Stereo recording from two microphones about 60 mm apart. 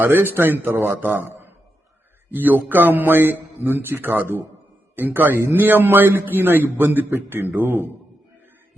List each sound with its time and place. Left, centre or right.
0.0 s a man's voice: right